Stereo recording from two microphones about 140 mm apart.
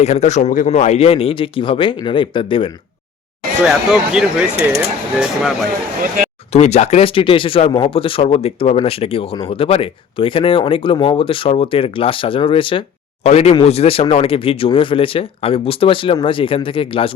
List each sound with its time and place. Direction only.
0.0 s speech: 50° left (ahead or behind)
0.7 s speech: 50° left (ahead or behind); by 2.6 s 35° left (ahead or behind)
3.7 s speech: 5° right (ahead or behind)
6.5 s speech: 55° left (ahead or behind)
13.2 s speech: 50° left (ahead or behind)